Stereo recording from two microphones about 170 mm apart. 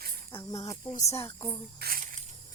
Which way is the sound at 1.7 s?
60° right (ahead or behind).